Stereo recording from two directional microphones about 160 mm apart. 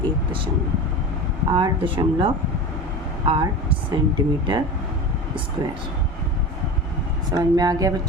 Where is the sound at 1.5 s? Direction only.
30° right (ahead or behind).